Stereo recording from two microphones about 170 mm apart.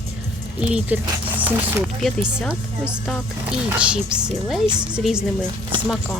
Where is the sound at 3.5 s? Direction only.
5° right (ahead or behind).